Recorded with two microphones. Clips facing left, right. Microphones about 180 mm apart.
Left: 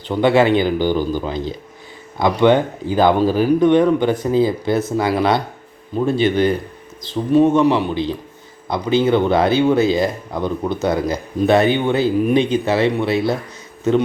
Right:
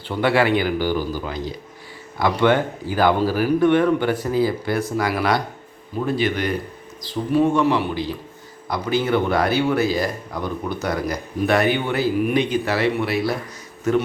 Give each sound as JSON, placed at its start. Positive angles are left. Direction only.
{"t": 0.1, "sound": "speech", "side_deg": 20}